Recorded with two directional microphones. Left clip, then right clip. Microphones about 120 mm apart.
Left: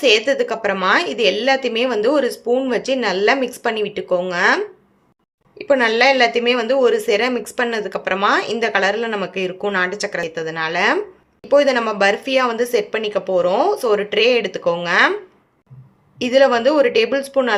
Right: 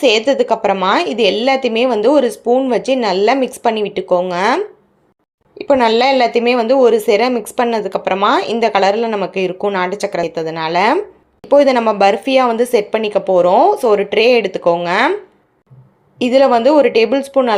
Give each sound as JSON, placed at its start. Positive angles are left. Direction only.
{"t": 0.0, "sound": "a woman's voice", "side_deg": -45}
{"t": 2.9, "sound": "a woman's voice", "side_deg": -40}
{"t": 16.2, "sound": "a woman's voice", "side_deg": -35}